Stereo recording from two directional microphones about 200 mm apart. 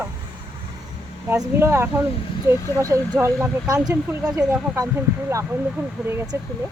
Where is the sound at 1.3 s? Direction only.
15° right (ahead or behind).